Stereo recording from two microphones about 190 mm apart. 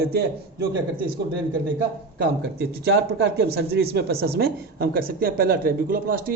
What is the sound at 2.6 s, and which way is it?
A man's voice, 60° right (ahead or behind).